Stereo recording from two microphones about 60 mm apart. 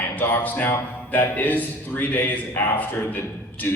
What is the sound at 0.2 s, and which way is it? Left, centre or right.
A man's voice, left.